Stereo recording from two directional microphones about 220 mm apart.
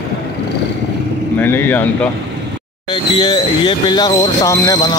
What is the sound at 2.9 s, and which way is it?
Speech, 20° left (ahead or behind).